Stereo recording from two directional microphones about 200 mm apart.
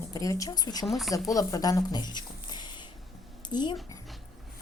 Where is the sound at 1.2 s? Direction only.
15° left (ahead or behind).